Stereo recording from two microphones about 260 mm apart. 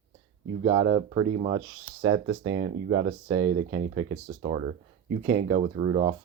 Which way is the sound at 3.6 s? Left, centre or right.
Right.